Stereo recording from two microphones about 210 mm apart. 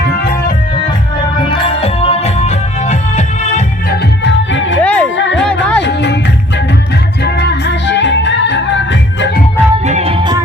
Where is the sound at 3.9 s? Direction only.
55° left (ahead or behind).